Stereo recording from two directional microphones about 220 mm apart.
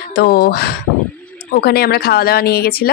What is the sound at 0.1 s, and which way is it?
Speech, 40° left (ahead or behind).